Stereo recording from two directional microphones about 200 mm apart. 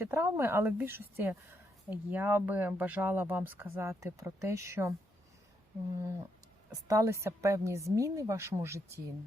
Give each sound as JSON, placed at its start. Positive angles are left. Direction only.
{"t": 0.0, "sound": "speech", "side_deg": -10}
{"t": 6.7, "sound": "speech", "side_deg": -15}